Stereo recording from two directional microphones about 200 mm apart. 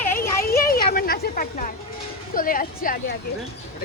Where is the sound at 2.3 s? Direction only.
45° left (ahead or behind).